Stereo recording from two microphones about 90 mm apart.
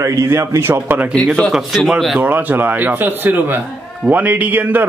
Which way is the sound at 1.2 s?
5° left (ahead or behind).